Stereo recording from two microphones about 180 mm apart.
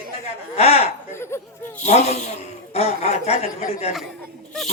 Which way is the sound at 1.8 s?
35° left (ahead or behind).